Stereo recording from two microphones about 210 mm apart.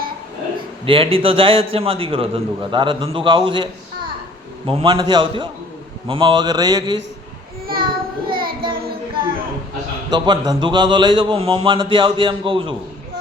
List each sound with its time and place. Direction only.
0.9 s a man's voice: 25° right (ahead or behind)
8.3 s child singing: 45° right (ahead or behind)
10.1 s a man's voice: 20° right (ahead or behind)